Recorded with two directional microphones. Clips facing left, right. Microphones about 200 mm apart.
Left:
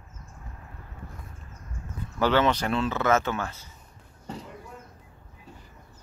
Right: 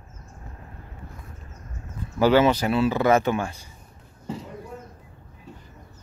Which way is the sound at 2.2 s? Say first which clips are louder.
Right 5 dB; 10° right (ahead or behind).